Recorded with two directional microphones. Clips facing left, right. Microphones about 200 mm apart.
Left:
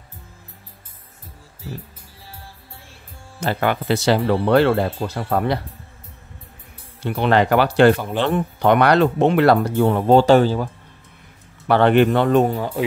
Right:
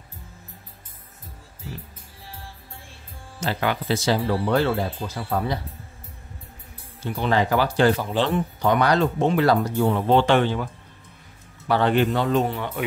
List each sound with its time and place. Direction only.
3.3 s speech: 55° left (ahead or behind)
7.1 s speech: 70° left (ahead or behind)
10.0 s speech: 40° left (ahead or behind)
11.6 s speech: 65° left (ahead or behind)
12.5 s speech: 30° left (ahead or behind)